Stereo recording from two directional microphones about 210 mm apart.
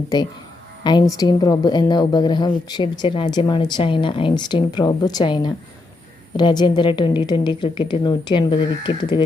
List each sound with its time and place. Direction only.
0.9 s a woman's voice: 20° left (ahead or behind)